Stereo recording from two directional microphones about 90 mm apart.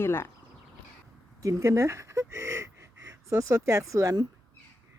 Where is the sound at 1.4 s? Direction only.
35° right (ahead or behind).